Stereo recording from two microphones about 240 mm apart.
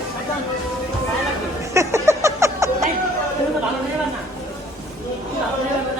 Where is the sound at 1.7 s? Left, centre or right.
Centre.